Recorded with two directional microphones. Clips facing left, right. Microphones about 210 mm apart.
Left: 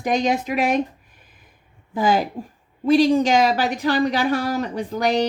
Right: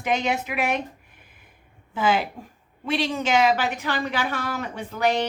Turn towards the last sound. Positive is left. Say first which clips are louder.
# left 3 dB
turn(degrees=40)  # may be behind; listen again after turning